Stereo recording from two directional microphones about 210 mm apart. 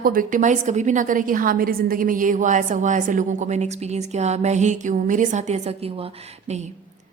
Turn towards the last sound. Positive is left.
turn(degrees=-30)  # may be behind; listen again after turning